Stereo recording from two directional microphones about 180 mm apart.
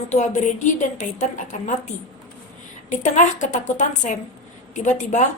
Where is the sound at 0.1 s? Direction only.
40° left (ahead or behind).